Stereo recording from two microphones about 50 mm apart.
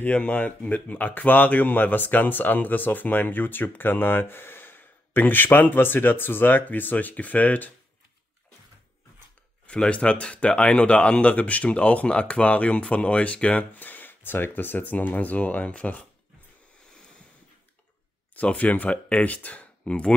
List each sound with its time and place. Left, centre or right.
0.0 s speech: left
9.7 s speech: left
13.7 s speech: left
18.3 s speech: left